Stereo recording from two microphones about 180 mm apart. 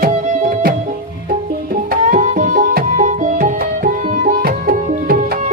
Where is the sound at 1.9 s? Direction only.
45° right (ahead or behind).